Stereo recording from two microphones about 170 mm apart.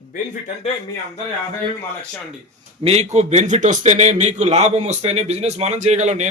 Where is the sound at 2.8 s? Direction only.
40° right (ahead or behind).